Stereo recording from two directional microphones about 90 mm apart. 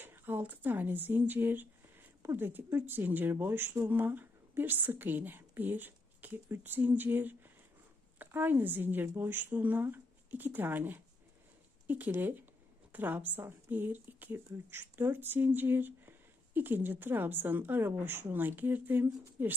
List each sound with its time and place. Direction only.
0.0 s a woman's voice: 25° right (ahead or behind)